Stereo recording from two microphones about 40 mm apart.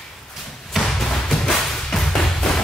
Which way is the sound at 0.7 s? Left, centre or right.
Centre.